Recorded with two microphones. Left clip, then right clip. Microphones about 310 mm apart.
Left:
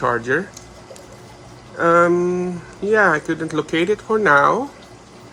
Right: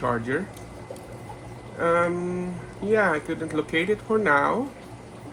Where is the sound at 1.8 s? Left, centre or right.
Left.